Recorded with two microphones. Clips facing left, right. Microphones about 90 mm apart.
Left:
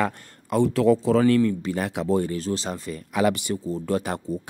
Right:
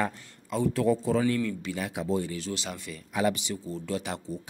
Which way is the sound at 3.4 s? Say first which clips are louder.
Left 7 dB; 45° left (ahead or behind).